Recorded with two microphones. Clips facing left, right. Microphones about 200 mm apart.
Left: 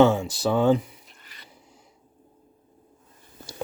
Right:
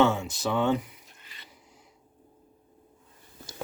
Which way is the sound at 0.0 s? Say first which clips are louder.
Left 5 dB; 30° left (ahead or behind).